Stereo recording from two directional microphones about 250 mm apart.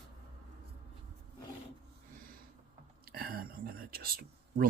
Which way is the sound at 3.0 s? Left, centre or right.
Right.